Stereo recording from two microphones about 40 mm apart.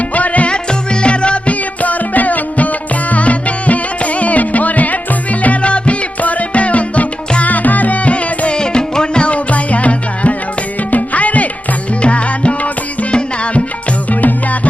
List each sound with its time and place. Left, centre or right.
0.1 s music: left
0.5 s music: left
14.1 s music: left